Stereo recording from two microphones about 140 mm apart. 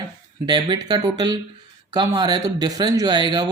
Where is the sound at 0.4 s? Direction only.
35° right (ahead or behind).